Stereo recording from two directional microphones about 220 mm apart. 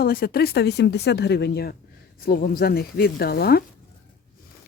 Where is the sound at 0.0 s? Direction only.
45° left (ahead or behind).